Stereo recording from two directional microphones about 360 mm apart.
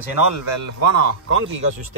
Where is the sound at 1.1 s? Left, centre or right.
Right.